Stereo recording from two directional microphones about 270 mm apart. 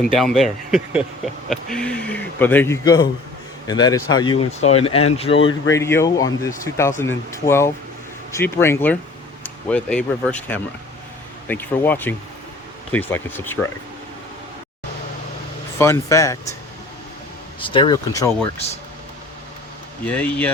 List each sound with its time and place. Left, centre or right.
0.0 s a man's voice: centre
6.7 s speech: left
7.0 s speech: centre
15.8 s speech: centre
17.6 s speech: centre
18.5 s speech: left
20.1 s a man's voice: centre